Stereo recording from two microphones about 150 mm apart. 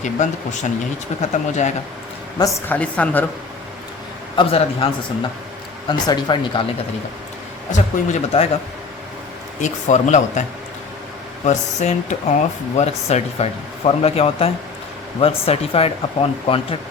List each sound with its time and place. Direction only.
0.0 s speech: 55° left (ahead or behind)
2.6 s a woman's voice: 10° left (ahead or behind)
4.4 s speech: 35° left (ahead or behind)
5.9 s speech: 30° left (ahead or behind)
7.7 s speech: 45° left (ahead or behind)
9.6 s speech: 55° left (ahead or behind)
11.4 s speech: 50° left (ahead or behind)